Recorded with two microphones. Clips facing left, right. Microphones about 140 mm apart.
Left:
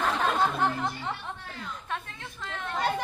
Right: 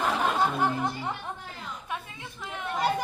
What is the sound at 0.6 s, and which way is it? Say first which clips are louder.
Music: right 1 dB; 10° right (ahead or behind).